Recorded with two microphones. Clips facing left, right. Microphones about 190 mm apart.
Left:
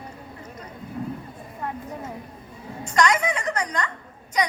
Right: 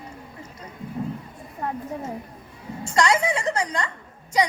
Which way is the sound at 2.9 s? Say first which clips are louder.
Right 1 dB; 30° right (ahead or behind).